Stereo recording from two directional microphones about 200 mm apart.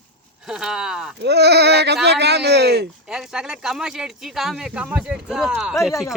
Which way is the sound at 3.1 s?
5° right (ahead or behind).